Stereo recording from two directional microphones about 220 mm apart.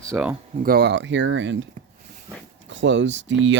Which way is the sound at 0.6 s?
45° right (ahead or behind).